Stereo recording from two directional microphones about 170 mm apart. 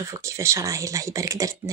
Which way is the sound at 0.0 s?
15° right (ahead or behind).